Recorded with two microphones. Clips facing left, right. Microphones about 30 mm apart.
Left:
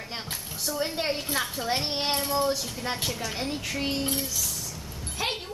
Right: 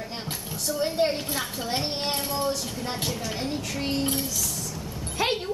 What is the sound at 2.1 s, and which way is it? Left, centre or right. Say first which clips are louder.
A woman's voice: left 1 dB; centre.